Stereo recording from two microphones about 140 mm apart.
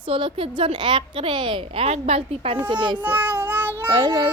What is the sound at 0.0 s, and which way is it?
A woman's voice, 40° right (ahead or behind).